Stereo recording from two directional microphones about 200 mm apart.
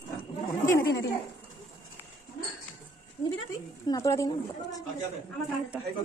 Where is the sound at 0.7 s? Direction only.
55° left (ahead or behind).